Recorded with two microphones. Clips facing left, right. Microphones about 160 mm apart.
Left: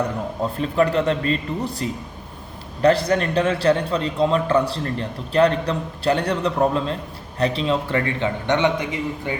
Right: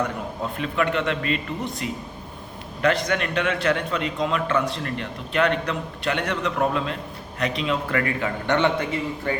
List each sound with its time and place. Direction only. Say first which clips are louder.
0.5 s a man's voice: left 5 dB; 35° left (ahead or behind); by 9.3 s 15° left (ahead or behind)